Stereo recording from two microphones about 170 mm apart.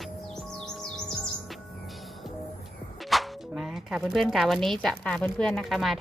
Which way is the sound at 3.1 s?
Centre (ahead or behind).